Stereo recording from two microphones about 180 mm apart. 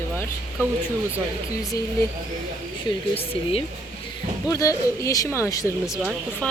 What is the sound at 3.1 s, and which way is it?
Speech, 30° left (ahead or behind).